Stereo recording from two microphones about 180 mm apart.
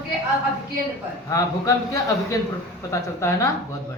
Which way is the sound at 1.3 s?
15° left (ahead or behind).